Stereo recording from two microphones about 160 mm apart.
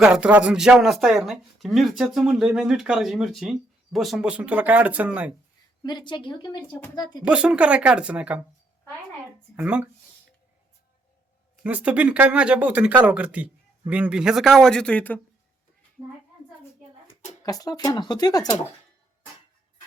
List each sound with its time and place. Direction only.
0.0 s speech: 5° right (ahead or behind)
5.8 s speech: 30° left (ahead or behind)
7.3 s speech: 5° right (ahead or behind)
9.6 s speech: 5° right (ahead or behind)
11.6 s speech: 10° right (ahead or behind); by 15.2 s 10° left (ahead or behind)
17.4 s speech: 25° left (ahead or behind)